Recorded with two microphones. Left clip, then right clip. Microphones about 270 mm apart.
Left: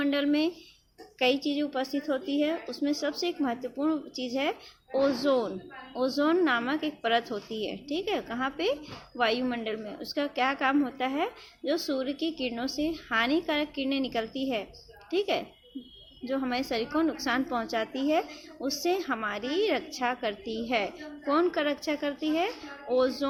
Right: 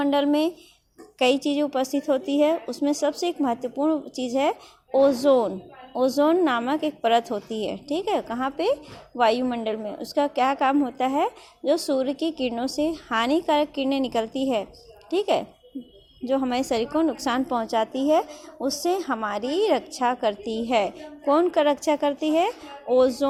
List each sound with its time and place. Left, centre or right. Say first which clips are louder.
0.0 s speech: right 5 dB; centre